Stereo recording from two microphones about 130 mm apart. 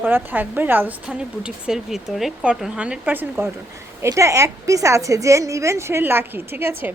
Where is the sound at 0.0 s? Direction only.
15° right (ahead or behind).